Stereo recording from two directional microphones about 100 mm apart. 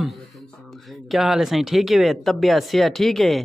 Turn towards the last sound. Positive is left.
turn(degrees=0)  # may be behind; listen again after turning